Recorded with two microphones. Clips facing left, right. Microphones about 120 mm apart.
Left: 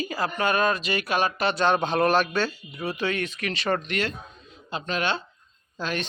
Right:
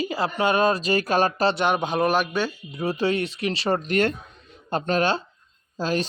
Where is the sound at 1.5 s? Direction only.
15° right (ahead or behind).